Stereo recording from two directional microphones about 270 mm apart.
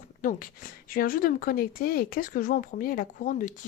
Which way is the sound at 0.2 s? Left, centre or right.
Left.